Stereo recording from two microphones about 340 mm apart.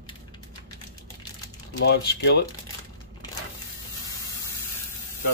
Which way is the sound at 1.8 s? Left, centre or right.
Left.